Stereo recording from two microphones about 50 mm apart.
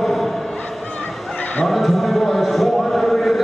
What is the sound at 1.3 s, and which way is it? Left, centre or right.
Neigh, left.